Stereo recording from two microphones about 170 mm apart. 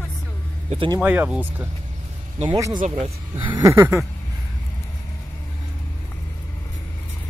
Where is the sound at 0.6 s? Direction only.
30° right (ahead or behind).